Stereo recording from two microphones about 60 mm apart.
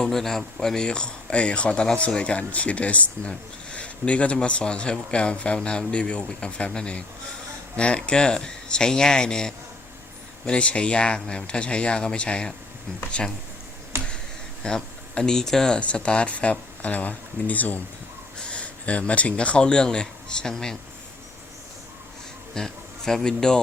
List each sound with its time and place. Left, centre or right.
0.0 s speech: centre
14.6 s speech: centre
22.5 s a man's voice: centre